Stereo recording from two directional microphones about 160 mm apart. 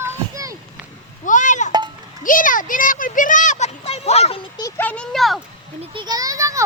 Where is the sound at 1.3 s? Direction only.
50° left (ahead or behind).